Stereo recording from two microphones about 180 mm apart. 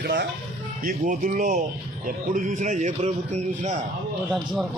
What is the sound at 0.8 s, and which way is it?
A man's voice, 50° right (ahead or behind).